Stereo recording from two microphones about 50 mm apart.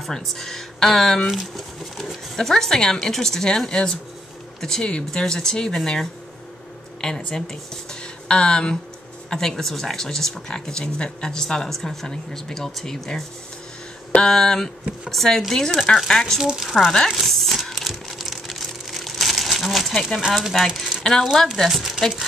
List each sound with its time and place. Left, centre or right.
0.0 s speech: centre
2.3 s speech: centre
7.0 s speech: centre
14.2 s speech: centre
16.3 s speech: centre
17.1 s crumpling: centre
19.9 s speech: centre
20.2 s speech: centre
20.5 s speech: centre
21.3 s speech: centre